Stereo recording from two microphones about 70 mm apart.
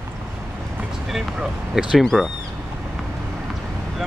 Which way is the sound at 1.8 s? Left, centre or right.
Centre.